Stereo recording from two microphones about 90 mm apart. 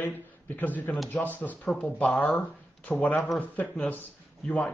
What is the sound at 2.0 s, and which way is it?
Speech, 5° left (ahead or behind).